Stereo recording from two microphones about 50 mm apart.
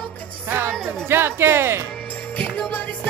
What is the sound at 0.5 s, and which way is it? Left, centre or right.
Speech, right.